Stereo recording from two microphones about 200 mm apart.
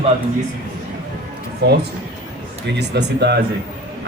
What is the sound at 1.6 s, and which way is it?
Speech, 55° right (ahead or behind).